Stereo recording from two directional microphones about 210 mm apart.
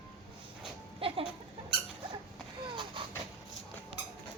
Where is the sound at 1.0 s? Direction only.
25° right (ahead or behind).